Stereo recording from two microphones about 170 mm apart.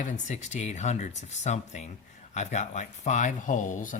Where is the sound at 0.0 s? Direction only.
45° left (ahead or behind).